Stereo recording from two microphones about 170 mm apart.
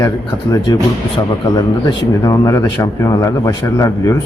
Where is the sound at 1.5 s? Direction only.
20° left (ahead or behind).